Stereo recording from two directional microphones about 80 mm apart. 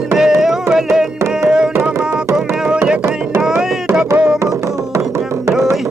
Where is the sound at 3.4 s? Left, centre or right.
Centre.